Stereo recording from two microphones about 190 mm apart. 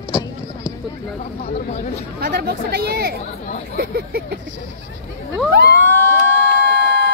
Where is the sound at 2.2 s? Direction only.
55° right (ahead or behind).